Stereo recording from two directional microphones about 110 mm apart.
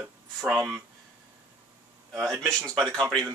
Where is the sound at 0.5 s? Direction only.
Centre (ahead or behind).